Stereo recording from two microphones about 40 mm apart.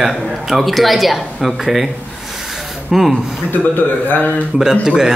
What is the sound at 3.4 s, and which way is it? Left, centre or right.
Speech, left.